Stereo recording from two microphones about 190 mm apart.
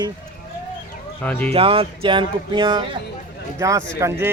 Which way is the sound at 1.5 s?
30° right (ahead or behind).